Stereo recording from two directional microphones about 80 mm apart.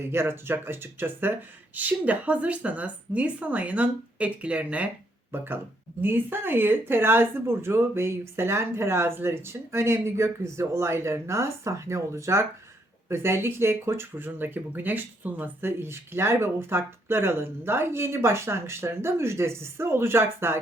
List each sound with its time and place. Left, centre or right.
0.0 s speech: right
5.3 s speech: right